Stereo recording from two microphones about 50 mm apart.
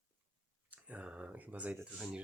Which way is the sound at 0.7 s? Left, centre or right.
Right.